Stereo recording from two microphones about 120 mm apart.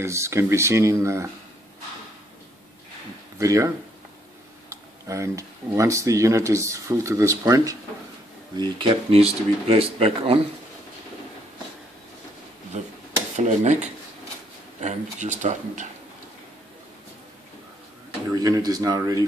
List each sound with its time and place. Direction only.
0.0 s speech: 25° right (ahead or behind)
3.3 s speech: 25° right (ahead or behind)
8.5 s speech: 45° right (ahead or behind)
13.4 s speech: 75° right (ahead or behind); by 15.9 s 90° right
18.3 s speech: 30° right (ahead or behind)